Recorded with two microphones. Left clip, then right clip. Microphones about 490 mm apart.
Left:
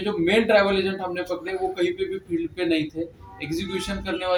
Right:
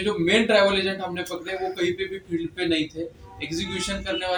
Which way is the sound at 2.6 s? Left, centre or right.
Left.